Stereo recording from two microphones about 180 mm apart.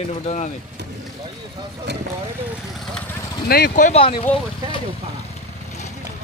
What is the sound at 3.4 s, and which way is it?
Speech, 60° left (ahead or behind).